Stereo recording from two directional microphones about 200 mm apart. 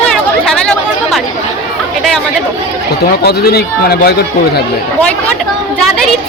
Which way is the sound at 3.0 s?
50° left (ahead or behind).